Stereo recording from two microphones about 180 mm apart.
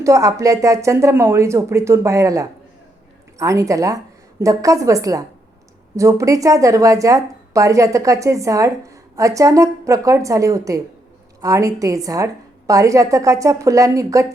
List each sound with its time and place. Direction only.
0.0 s a woman's voice: 20° right (ahead or behind)